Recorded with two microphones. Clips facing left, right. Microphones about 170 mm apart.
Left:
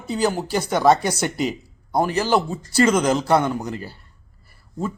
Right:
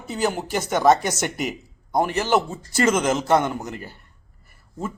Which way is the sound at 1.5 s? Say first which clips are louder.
Left 3 dB; 15° right (ahead or behind).